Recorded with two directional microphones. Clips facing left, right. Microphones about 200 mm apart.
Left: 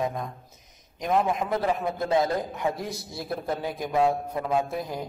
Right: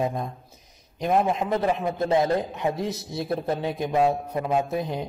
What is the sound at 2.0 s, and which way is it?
A man's voice, 25° right (ahead or behind).